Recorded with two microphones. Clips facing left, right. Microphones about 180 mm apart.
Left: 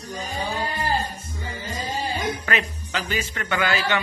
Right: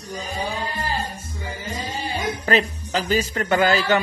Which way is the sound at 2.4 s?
35° right (ahead or behind).